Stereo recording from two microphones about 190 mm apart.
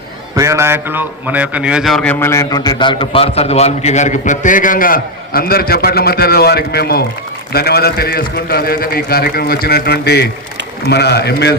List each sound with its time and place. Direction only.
0.3 s a man's voice: 15° right (ahead or behind); by 11.5 s 60° left (ahead or behind)